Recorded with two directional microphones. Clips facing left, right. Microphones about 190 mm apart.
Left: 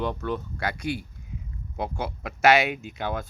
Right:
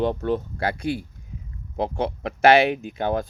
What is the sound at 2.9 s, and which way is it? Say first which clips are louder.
Speech: right 6 dB; 50° right (ahead or behind).